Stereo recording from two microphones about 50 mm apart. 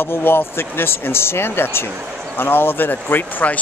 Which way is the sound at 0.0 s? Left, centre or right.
Left.